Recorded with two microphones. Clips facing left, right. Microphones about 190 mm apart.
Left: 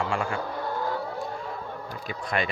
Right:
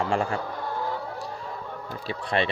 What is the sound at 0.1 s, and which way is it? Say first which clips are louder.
Vehicle: right 3 dB; 40° right (ahead or behind).